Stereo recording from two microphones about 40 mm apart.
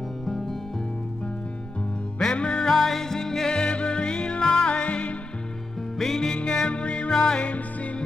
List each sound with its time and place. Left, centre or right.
0.3 s music: centre
2.3 s music: left
2.7 s music: centre; by 5.1 s left
5.9 s music: centre
6.3 s music: left
7.4 s music: left